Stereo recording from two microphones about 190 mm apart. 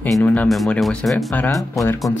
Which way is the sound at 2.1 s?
15° left (ahead or behind).